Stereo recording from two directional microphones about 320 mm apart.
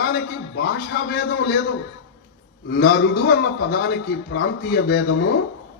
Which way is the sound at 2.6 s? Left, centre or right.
Left.